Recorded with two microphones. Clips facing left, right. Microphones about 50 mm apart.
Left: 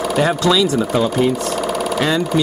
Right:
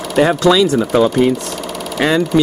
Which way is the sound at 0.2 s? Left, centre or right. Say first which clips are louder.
Right 5 dB; centre.